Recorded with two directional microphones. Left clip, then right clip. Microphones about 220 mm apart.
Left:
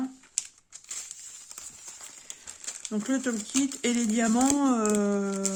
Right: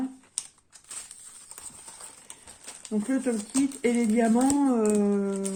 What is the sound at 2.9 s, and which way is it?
Speech, 50° left (ahead or behind).